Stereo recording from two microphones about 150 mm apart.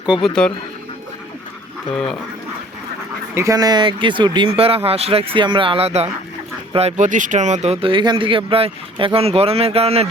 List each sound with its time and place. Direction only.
0.4 s speech: 5° left (ahead or behind)
3.3 s speech: 20° right (ahead or behind); by 10.1 s 40° right (ahead or behind)